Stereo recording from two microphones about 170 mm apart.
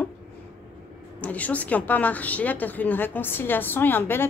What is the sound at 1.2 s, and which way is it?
A woman's voice, 10° left (ahead or behind).